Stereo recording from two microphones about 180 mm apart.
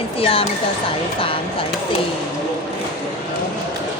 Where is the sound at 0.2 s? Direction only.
30° left (ahead or behind).